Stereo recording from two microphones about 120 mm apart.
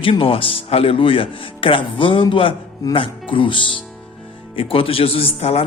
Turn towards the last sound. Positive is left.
turn(degrees=55)  # may be behind; listen again after turning